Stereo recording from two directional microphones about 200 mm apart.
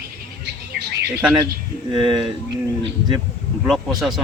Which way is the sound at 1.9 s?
Centre (ahead or behind).